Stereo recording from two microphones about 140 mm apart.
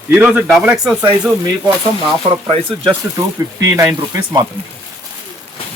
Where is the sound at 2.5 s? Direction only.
45° right (ahead or behind).